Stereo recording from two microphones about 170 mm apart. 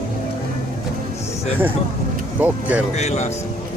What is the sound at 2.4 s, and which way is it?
Speech, 10° right (ahead or behind).